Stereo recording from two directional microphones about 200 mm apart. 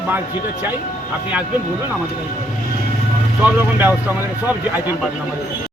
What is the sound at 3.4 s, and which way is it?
Speech, 10° right (ahead or behind).